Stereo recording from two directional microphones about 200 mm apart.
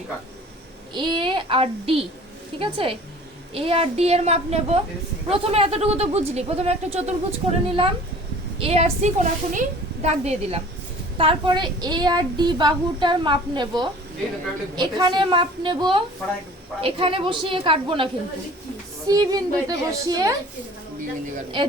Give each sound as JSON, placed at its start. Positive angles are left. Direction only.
{"t": 0.9, "sound": "a woman's voice", "side_deg": -25}
{"t": 21.6, "sound": "a woman's voice", "side_deg": -25}